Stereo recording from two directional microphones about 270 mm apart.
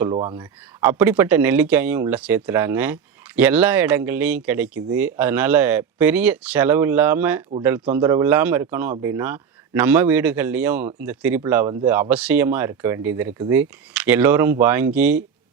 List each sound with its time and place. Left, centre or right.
0.1 s speech: centre
0.8 s speech: centre